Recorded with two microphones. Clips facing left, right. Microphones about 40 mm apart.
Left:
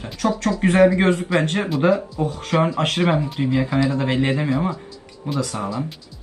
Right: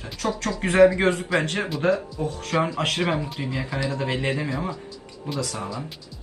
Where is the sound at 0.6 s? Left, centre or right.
Left.